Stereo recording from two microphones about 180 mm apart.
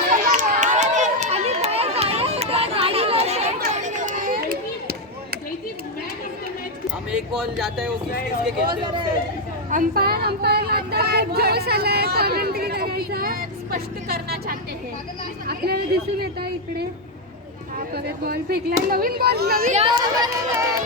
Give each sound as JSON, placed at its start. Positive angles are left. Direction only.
{"t": 0.1, "sound": "run", "side_deg": -45}
{"t": 3.7, "sound": "chop", "side_deg": -45}
{"t": 7.1, "sound": "speech", "side_deg": -5}
{"t": 8.6, "sound": "speech", "side_deg": -25}
{"t": 9.6, "sound": "speech", "side_deg": -50}
{"t": 17.9, "sound": "speech", "side_deg": -60}
{"t": 19.7, "sound": "speech", "side_deg": -30}